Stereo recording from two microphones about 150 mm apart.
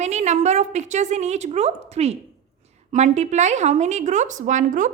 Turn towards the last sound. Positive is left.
turn(degrees=-55)  # may be behind; listen again after turning